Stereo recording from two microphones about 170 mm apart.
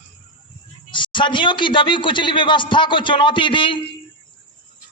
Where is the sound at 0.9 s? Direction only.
30° left (ahead or behind).